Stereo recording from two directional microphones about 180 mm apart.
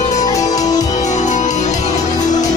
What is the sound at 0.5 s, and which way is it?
Music, 20° left (ahead or behind).